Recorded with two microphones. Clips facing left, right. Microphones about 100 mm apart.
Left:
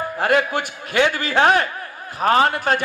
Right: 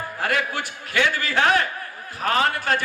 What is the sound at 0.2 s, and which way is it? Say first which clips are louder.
A man's voice: left 6 dB; 25° left (ahead or behind).